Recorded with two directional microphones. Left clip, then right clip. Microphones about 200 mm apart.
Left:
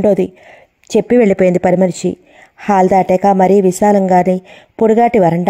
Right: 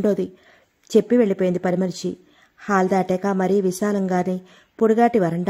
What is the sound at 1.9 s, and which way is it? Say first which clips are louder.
Speech: left 10 dB; 50° left (ahead or behind).